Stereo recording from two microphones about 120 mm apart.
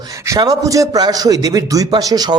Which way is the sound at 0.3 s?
30° right (ahead or behind).